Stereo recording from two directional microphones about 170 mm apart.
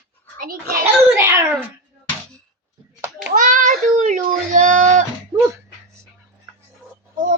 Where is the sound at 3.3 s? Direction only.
50° right (ahead or behind).